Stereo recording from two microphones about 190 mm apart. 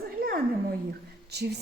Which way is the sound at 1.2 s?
60° right (ahead or behind).